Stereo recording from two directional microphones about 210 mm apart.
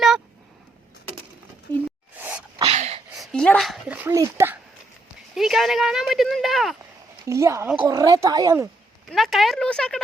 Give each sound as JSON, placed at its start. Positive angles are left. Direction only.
{"t": 1.7, "sound": "a sound", "side_deg": 5}
{"t": 2.1, "sound": "sneeze", "side_deg": -10}
{"t": 2.6, "sound": "a sound", "side_deg": -30}
{"t": 3.2, "sound": "speech", "side_deg": 5}
{"t": 5.3, "sound": "speech", "side_deg": 0}
{"t": 7.3, "sound": "speech", "side_deg": -15}
{"t": 9.1, "sound": "speech", "side_deg": 0}